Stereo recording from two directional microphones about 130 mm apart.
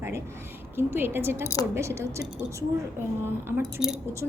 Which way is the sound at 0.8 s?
20° right (ahead or behind).